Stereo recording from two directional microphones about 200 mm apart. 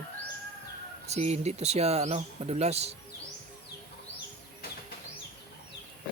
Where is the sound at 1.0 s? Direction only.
35° right (ahead or behind).